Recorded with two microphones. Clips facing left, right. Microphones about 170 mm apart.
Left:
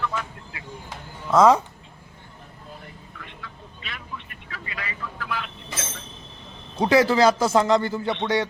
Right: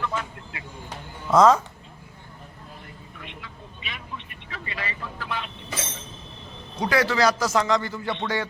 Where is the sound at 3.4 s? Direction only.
20° right (ahead or behind).